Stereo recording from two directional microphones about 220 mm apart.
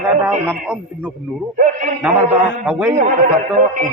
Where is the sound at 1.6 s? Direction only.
35° right (ahead or behind).